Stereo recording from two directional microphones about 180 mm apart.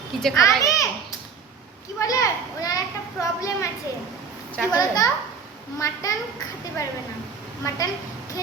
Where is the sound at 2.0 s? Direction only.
20° left (ahead or behind).